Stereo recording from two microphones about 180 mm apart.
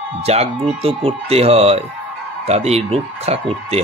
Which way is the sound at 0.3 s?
35° right (ahead or behind).